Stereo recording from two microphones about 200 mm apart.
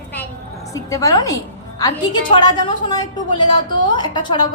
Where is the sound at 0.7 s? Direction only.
15° left (ahead or behind).